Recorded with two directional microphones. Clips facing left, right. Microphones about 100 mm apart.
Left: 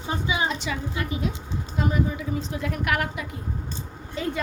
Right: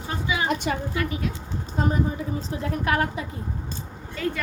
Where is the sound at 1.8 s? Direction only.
40° right (ahead or behind).